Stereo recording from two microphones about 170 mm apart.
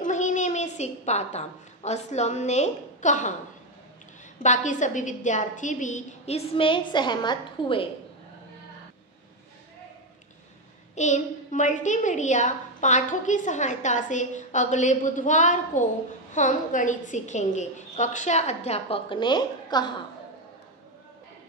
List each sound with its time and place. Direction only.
0.0 s a woman's voice: 45° left (ahead or behind)
4.4 s a woman's voice: 45° left (ahead or behind)
11.0 s a woman's voice: 45° left (ahead or behind); by 19.9 s 25° left (ahead or behind)